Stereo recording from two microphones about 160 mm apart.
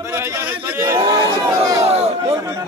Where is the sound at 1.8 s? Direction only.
40° right (ahead or behind).